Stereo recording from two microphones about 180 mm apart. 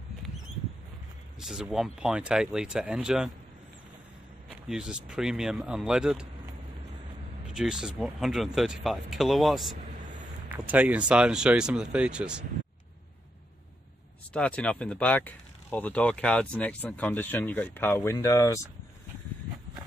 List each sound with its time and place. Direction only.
1.4 s speech: centre (ahead or behind)
4.5 s speech: 5° right (ahead or behind)
7.5 s speech: 5° right (ahead or behind)
14.3 s speech: 5° left (ahead or behind)